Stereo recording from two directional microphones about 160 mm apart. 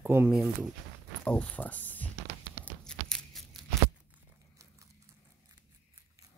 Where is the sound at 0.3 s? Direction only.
5° right (ahead or behind).